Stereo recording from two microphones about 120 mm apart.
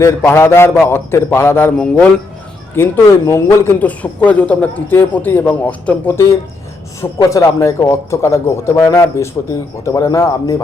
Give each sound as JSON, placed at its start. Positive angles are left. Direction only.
{"t": 0.2, "sound": "speech", "side_deg": 20}
{"t": 7.2, "sound": "speech", "side_deg": 30}